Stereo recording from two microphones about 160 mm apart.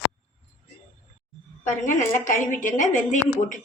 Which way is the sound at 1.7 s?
55° left (ahead or behind).